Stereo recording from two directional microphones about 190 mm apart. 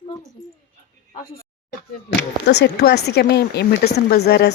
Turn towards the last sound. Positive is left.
turn(degrees=60)  # may be behind; listen again after turning